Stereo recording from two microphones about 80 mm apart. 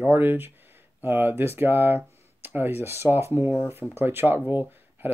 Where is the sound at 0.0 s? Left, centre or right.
Right.